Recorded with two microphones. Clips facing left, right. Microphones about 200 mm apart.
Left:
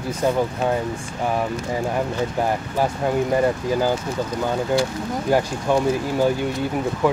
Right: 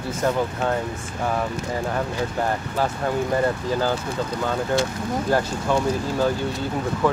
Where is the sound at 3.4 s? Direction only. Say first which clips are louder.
Left 2 dB; 15° left (ahead or behind).